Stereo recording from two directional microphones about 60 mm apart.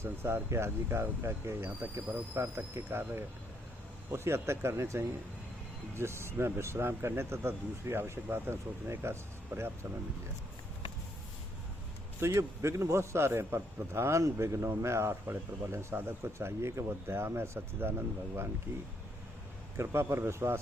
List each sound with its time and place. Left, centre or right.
0.0 s a man's voice: right
12.2 s a man's voice: right
19.7 s a man's voice: right